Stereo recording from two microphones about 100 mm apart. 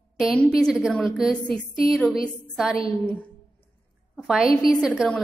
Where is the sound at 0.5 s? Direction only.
5° left (ahead or behind).